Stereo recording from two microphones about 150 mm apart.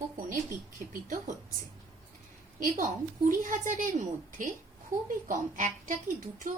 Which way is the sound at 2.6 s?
60° right (ahead or behind).